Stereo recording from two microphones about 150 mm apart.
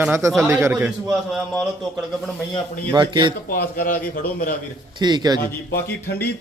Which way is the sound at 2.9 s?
30° right (ahead or behind).